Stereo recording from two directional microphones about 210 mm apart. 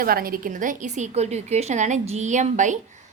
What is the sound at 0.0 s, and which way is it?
A woman's voice, 45° right (ahead or behind).